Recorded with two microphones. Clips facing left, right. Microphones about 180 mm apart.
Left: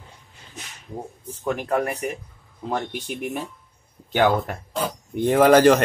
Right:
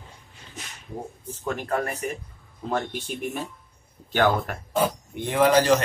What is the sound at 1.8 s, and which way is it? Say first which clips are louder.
Speech: left 4 dB; 15° left (ahead or behind).